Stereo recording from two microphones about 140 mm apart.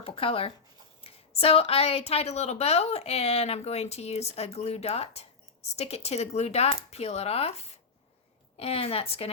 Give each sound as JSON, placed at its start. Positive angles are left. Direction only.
{"t": 0.0, "sound": "a woman's voice", "side_deg": 40}